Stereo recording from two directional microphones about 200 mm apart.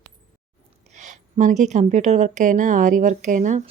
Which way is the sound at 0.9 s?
35° right (ahead or behind).